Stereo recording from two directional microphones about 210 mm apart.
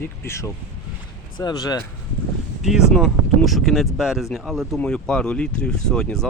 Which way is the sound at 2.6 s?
Centre (ahead or behind).